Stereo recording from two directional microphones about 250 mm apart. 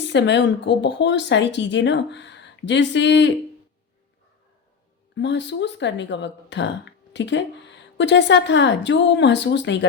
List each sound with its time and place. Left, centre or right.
0.1 s speech: left
5.1 s speech: left